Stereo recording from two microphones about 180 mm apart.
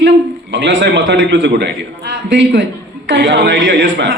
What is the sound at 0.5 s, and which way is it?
A man's voice, 85° right.